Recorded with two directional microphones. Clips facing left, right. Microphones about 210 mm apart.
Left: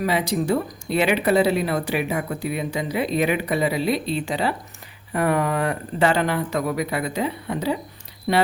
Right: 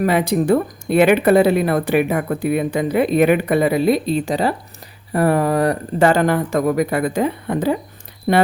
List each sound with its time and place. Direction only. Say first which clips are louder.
0.0 s speech: right 6 dB; 55° right (ahead or behind)